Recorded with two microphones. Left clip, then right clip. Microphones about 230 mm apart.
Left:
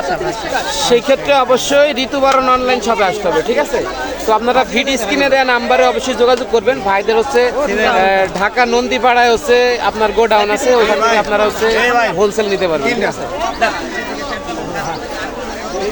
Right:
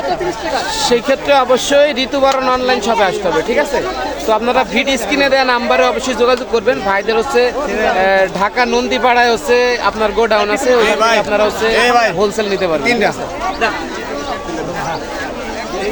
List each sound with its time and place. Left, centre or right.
0.5 s speech: centre
11.7 s a man's voice: right
12.2 s speech: centre
12.9 s a man's voice: right